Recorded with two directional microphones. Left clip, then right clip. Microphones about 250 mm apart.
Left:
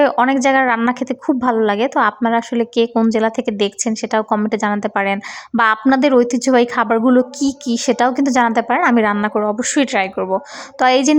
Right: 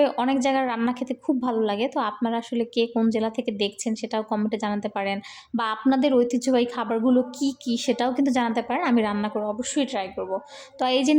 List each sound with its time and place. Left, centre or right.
0.0 s a woman's voice: centre